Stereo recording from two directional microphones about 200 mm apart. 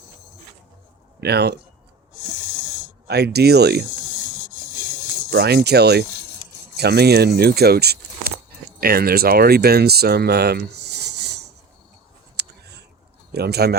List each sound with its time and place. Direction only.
1.2 s speech: 55° right (ahead or behind)
3.1 s speech: 55° right (ahead or behind)
5.3 s speech: 55° right (ahead or behind)
12.4 s a sound: 55° right (ahead or behind)
13.3 s speech: 55° right (ahead or behind)